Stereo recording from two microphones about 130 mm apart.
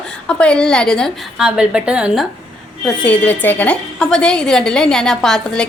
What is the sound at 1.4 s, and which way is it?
Speech, 5° right (ahead or behind).